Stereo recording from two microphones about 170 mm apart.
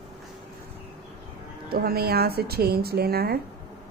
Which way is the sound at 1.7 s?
65° right (ahead or behind).